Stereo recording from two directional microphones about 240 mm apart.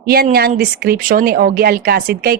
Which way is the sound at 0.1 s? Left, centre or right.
Right.